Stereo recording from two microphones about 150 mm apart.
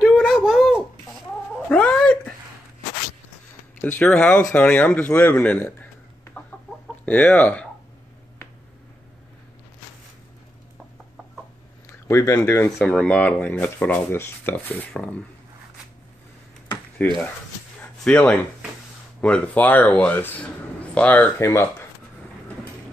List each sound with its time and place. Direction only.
0.0 s a sound: centre (ahead or behind)
1.7 s cat: 10° left (ahead or behind)
3.8 s speech: 10° left (ahead or behind)
12.1 s speech: 20° left (ahead or behind)
12.8 s speech: 5° left (ahead or behind)
17.0 s speech: 10° left (ahead or behind)